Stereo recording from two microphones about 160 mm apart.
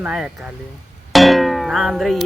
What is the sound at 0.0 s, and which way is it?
Speech, 5° right (ahead or behind).